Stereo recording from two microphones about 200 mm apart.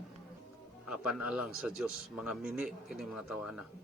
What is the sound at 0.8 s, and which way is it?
Speech, 5° right (ahead or behind).